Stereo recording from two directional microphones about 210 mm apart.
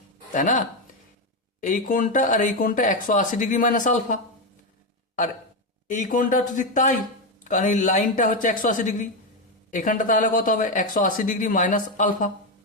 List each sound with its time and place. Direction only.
0.3 s speech: 35° left (ahead or behind)
1.6 s speech: 40° left (ahead or behind)
5.9 s speech: 40° left (ahead or behind)